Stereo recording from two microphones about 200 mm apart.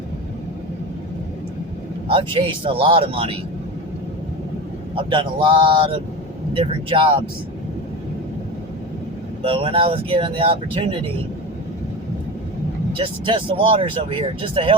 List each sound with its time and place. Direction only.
2.0 s speech: 25° right (ahead or behind)
5.1 s speech: 25° right (ahead or behind)
9.4 s speech: 30° right (ahead or behind)
13.0 s speech: 25° right (ahead or behind)